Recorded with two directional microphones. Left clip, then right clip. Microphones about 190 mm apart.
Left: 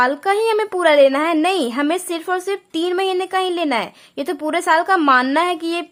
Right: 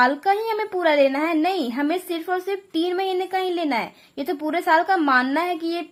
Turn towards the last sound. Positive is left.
turn(degrees=20)  # may be behind; listen again after turning